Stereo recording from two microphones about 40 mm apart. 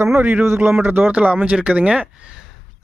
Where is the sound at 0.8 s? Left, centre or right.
Right.